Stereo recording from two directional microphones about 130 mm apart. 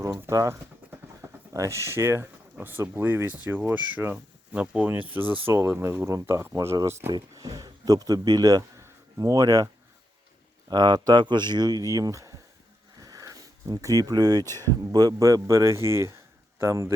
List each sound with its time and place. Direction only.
0.0 s speech: 20° right (ahead or behind)
1.2 s a sound: 20° right (ahead or behind)
1.5 s speech: 25° right (ahead or behind)
10.7 s speech: 35° right (ahead or behind)
13.0 s a sound: 30° right (ahead or behind)
14.5 s speech: 30° right (ahead or behind)